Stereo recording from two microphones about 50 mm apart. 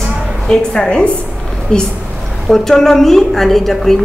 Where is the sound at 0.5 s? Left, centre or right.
Centre.